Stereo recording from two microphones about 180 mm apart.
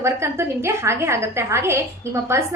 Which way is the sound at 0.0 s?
15° right (ahead or behind).